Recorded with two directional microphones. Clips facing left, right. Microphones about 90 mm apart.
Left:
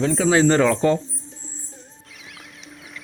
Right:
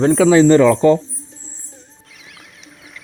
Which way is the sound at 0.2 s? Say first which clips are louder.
Right 8 dB; 90° right.